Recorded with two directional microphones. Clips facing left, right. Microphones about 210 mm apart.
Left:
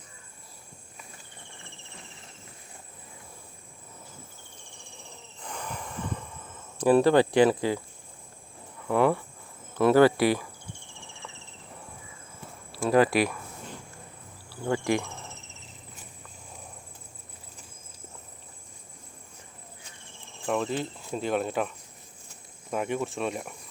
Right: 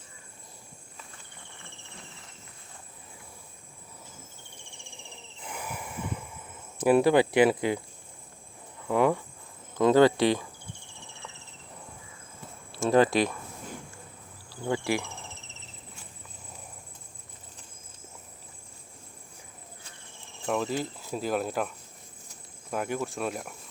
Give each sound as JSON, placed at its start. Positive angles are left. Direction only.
{"t": 5.4, "sound": "a sound", "side_deg": -10}
{"t": 8.9, "sound": "speech", "side_deg": -15}
{"t": 12.8, "sound": "speech", "side_deg": -25}
{"t": 13.1, "sound": "speech", "side_deg": 5}
{"t": 20.5, "sound": "speech", "side_deg": -5}
{"t": 22.7, "sound": "speech", "side_deg": 0}